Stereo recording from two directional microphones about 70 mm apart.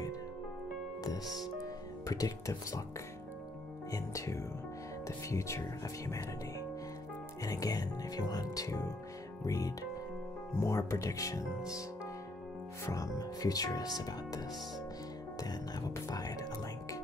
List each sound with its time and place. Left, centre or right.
1.6 s music: left
3.9 s speech: left
7.4 s speech: left
8.6 s speech: left
12.8 s speech: left